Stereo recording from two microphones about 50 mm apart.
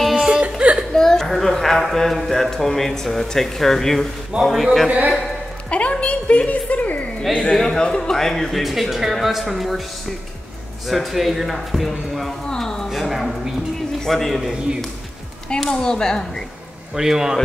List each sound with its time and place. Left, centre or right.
0.0 s music: centre
0.6 s whimper: right
0.9 s whimper: centre
1.2 s speech: centre
4.4 s speech: centre
4.8 s a man's voice: right
5.7 s a woman's voice: left
7.5 s speech: centre
10.9 s speech: centre
12.4 s a sound: centre
12.9 s speech: centre
15.6 s speech: centre
16.9 s speech: centre